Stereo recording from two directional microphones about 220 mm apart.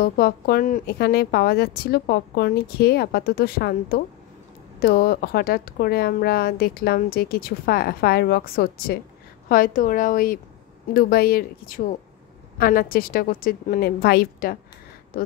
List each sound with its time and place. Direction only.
0.0 s a woman's voice: 40° left (ahead or behind)